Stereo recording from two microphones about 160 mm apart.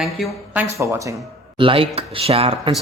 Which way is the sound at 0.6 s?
15° right (ahead or behind).